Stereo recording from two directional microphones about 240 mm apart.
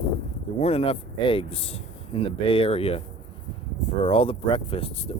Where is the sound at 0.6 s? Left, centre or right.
Left.